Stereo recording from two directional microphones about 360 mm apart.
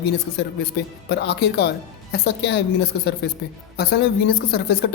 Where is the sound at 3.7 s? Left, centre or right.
Left.